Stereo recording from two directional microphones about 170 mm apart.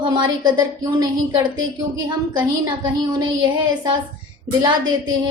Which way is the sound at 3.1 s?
25° right (ahead or behind).